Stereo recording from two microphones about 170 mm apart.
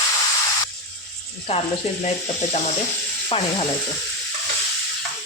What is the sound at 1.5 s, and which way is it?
Speech, 35° left (ahead or behind).